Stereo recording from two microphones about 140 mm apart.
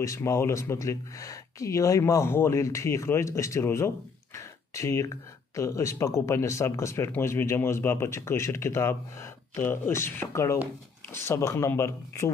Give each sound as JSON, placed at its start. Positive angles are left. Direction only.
{"t": 0.0, "sound": "speech", "side_deg": 20}